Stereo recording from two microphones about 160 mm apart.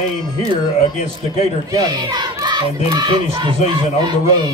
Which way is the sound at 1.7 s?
25° right (ahead or behind).